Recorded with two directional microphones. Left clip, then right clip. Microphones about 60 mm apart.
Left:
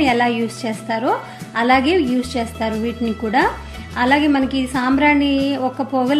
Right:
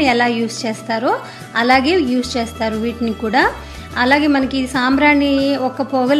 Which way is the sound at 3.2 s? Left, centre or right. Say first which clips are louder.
Right 2 dB; centre.